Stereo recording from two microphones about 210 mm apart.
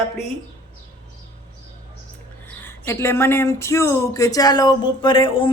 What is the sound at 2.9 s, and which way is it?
Speech, 10° left (ahead or behind).